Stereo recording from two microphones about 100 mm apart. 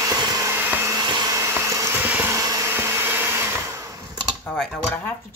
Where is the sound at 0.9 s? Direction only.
45° right (ahead or behind).